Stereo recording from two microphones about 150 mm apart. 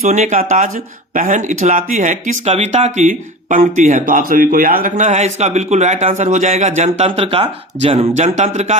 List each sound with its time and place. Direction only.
0.0 s speech: 55° right (ahead or behind)